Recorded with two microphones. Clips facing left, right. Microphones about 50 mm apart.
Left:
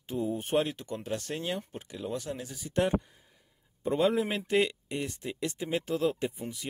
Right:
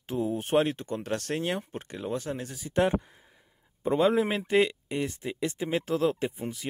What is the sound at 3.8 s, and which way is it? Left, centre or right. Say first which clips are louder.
Speech: right 3 dB; right.